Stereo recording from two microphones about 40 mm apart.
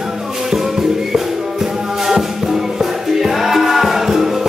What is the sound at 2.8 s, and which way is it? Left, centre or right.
Music, centre.